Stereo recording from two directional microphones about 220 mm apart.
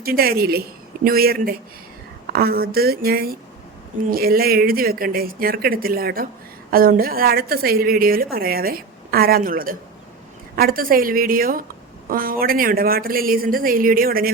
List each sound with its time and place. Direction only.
0.0 s a woman's voice: 45° right (ahead or behind)